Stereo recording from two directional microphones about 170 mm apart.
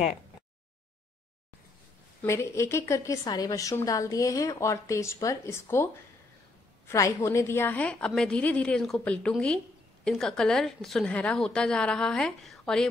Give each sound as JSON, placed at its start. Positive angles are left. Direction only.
{"t": 2.2, "sound": "a woman's voice", "side_deg": 15}
{"t": 6.9, "sound": "a woman's voice", "side_deg": 15}